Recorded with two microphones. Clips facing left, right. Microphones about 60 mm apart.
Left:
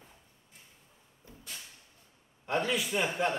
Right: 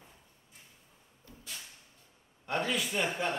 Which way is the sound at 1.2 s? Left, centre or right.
Left.